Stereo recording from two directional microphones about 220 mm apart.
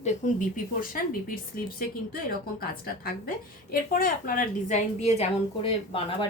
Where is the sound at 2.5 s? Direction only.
40° left (ahead or behind).